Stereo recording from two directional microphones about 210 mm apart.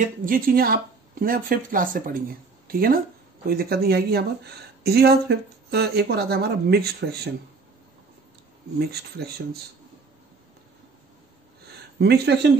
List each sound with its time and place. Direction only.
0.0 s speech: 40° right (ahead or behind)
8.7 s speech: 50° right (ahead or behind)
12.0 s speech: 50° right (ahead or behind)